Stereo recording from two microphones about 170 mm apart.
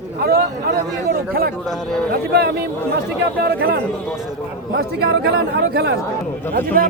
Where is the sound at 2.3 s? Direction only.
70° right (ahead or behind).